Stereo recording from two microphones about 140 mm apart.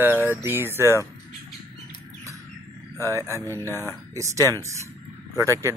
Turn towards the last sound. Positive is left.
turn(degrees=-20)  # may be behind; listen again after turning